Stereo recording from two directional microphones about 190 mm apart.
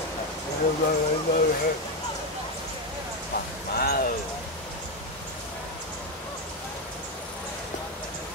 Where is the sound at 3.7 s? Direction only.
50° left (ahead or behind).